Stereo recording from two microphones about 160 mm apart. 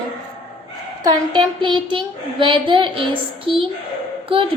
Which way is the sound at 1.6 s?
30° right (ahead or behind).